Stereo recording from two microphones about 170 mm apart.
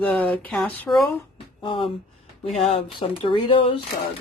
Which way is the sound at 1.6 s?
30° left (ahead or behind).